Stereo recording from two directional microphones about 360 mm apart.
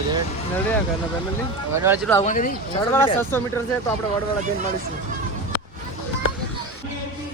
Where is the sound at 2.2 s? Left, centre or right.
Left.